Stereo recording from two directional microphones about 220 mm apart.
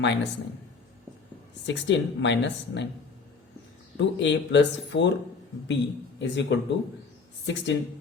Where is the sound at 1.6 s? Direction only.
55° left (ahead or behind).